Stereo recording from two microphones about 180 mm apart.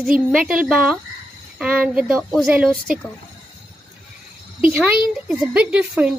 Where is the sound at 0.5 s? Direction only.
5° right (ahead or behind).